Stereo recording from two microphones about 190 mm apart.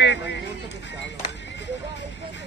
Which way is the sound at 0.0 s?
65° left (ahead or behind).